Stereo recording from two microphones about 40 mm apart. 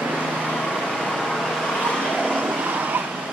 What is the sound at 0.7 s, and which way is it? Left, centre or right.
Vehicle, centre.